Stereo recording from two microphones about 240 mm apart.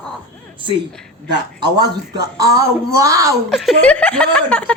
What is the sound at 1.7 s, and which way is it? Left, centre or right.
Speech, centre.